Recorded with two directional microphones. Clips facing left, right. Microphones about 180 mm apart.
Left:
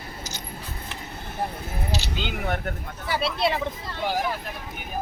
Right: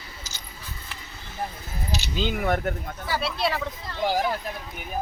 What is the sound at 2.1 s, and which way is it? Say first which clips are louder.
Speech: right 8 dB; 40° right (ahead or behind).